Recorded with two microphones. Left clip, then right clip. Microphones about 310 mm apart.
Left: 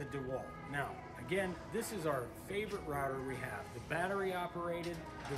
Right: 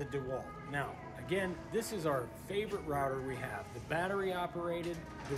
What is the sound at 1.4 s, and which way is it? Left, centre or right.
Speech, centre.